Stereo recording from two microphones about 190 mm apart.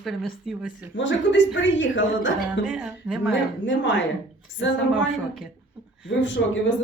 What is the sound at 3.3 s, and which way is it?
Speech, 70° left (ahead or behind).